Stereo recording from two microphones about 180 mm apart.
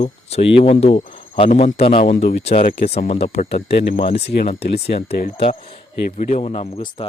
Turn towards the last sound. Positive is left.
turn(degrees=35)  # may be behind; listen again after turning